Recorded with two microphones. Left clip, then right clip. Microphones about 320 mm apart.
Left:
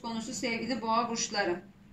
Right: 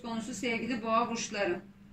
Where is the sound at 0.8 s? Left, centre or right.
Centre.